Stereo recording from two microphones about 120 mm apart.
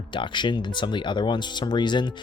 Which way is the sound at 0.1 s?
40° left (ahead or behind).